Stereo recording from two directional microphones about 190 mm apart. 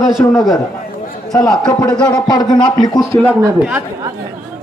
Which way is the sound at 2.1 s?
20° left (ahead or behind).